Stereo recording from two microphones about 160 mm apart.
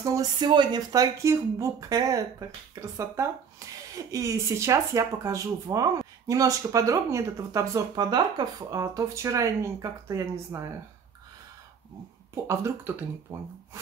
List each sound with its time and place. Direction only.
0.0 s speech: 20° right (ahead or behind)
12.4 s speech: 15° right (ahead or behind)